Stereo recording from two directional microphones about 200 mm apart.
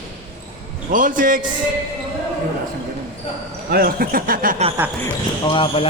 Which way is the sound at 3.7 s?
45° right (ahead or behind).